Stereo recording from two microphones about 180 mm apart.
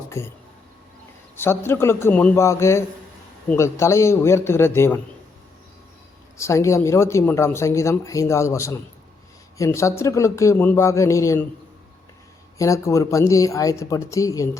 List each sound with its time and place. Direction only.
0.1 s speech: 15° left (ahead or behind)
1.4 s speech: 15° left (ahead or behind)
6.3 s speech: 15° left (ahead or behind)
12.5 s speech: 15° left (ahead or behind)